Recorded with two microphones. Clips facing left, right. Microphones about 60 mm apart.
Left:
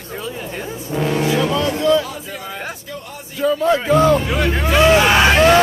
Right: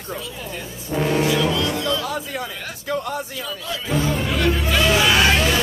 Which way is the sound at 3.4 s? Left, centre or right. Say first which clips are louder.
Left 14 dB; left.